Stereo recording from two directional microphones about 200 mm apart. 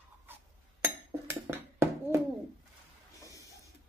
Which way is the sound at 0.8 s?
10° right (ahead or behind).